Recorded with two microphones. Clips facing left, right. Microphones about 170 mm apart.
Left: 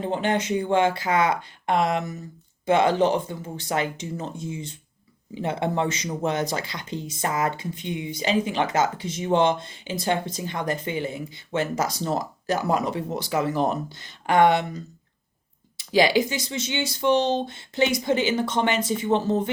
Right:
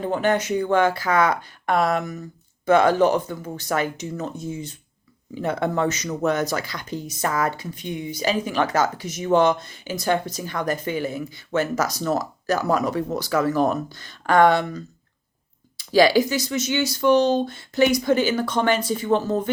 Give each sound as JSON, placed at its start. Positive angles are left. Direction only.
{"t": 0.0, "sound": "speech", "side_deg": 25}
{"t": 7.9, "sound": "speech", "side_deg": -45}
{"t": 8.1, "sound": "speech", "side_deg": 25}